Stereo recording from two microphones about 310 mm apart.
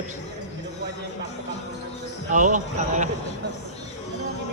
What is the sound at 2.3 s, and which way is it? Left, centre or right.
Speech, right.